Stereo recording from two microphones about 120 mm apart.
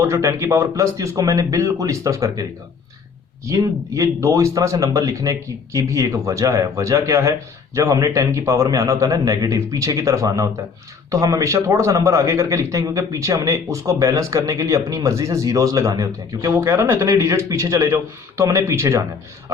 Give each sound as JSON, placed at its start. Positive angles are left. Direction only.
{"t": 0.0, "sound": "a man's voice", "side_deg": -25}